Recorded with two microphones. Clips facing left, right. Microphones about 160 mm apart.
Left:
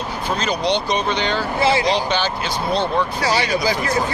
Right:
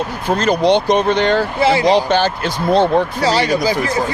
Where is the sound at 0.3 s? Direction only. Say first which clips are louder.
Right 7 dB; 55° right (ahead or behind).